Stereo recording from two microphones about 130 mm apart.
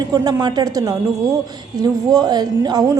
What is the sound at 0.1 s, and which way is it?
A woman's voice, 30° right (ahead or behind).